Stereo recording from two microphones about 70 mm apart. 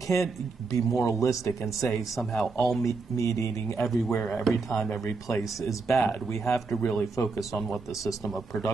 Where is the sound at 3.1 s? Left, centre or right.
Left.